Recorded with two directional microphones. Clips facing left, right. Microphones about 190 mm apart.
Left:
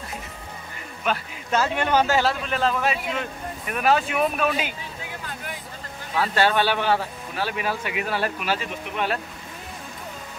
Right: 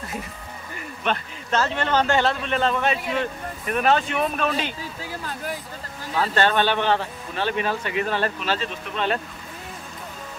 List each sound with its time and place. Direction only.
1.0 s a man's voice: 10° left (ahead or behind)
5.0 s vehicle: 40° right (ahead or behind)
6.1 s speech: 10° left (ahead or behind)